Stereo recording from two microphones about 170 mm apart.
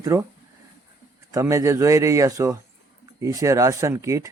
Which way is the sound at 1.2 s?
20° right (ahead or behind).